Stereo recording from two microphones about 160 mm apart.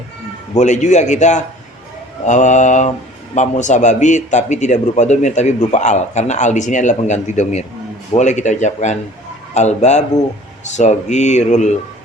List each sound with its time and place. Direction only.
0.5 s a man's voice: 45° left (ahead or behind)